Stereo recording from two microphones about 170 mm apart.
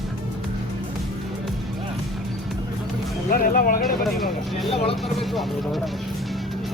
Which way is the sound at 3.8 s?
Centre (ahead or behind).